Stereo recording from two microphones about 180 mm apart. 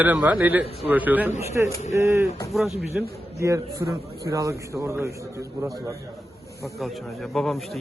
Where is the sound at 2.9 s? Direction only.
15° right (ahead or behind).